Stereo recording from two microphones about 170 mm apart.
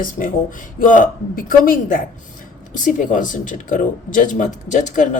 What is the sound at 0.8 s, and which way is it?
Speech, 50° left (ahead or behind).